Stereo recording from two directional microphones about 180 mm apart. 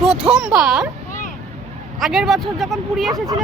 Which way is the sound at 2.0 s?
Centre (ahead or behind).